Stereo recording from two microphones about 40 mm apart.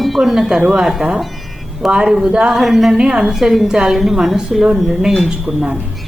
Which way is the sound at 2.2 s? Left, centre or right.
Right.